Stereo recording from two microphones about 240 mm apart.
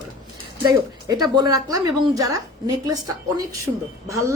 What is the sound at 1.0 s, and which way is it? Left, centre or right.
A woman's voice, centre.